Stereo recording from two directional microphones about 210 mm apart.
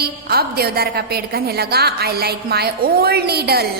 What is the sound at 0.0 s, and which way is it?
A woman's voice, 50° right (ahead or behind).